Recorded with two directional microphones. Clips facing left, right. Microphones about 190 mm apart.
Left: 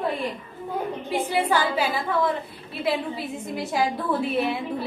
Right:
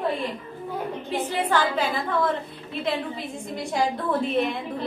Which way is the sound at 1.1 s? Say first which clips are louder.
Left 2 dB; 10° left (ahead or behind).